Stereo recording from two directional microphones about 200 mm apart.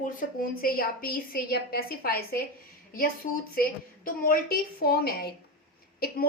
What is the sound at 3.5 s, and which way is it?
A woman's voice, 45° left (ahead or behind).